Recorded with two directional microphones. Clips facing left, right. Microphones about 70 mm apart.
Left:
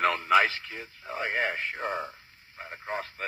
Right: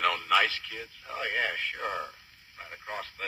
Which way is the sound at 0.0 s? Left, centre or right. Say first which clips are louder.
Left 3 dB; left.